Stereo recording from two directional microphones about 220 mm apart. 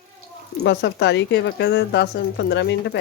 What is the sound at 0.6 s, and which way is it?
A woman's voice, 50° left (ahead or behind).